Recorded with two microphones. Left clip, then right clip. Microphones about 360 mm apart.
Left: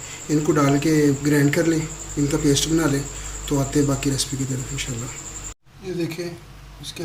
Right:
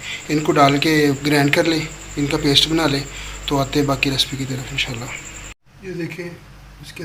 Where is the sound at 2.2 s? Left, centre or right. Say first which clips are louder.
Right 5 dB; centre.